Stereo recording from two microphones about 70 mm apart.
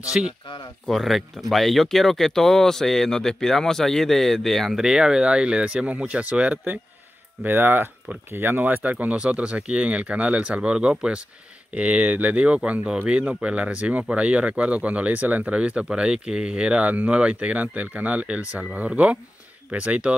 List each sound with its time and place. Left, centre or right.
0.2 s speech: centre
0.8 s speech: centre
4.7 s speech: centre